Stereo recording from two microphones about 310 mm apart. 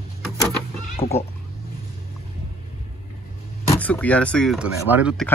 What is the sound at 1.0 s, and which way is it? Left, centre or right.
Speech, centre.